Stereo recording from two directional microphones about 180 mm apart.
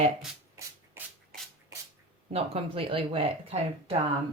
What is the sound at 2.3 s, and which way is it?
Speech, 30° right (ahead or behind).